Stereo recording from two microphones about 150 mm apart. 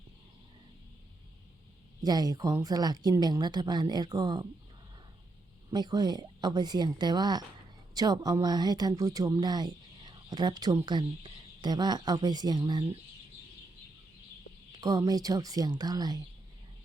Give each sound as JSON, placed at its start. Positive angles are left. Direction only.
{"t": 2.0, "sound": "a woman's voice", "side_deg": -25}
{"t": 5.7, "sound": "a woman's voice", "side_deg": -30}
{"t": 14.8, "sound": "a woman's voice", "side_deg": -25}